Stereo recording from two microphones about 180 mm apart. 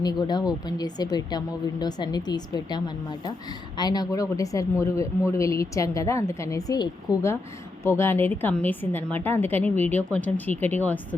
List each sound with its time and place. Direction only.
0.0 s speech: 20° left (ahead or behind)